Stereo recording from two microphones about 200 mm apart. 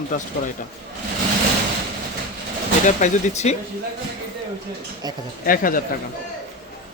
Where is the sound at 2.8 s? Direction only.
35° left (ahead or behind).